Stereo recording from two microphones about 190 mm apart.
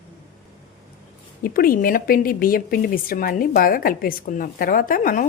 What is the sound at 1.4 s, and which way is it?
Speech, 50° left (ahead or behind).